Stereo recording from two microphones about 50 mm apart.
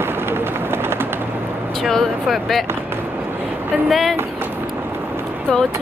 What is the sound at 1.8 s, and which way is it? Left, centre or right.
Speech, centre.